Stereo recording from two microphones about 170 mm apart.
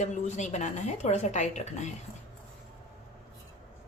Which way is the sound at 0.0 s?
45° left (ahead or behind).